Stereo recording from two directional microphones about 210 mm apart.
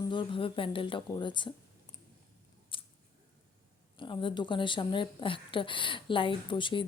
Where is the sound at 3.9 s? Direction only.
25° left (ahead or behind).